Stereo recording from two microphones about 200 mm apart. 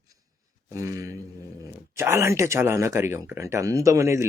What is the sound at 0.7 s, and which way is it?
Speech, 15° right (ahead or behind).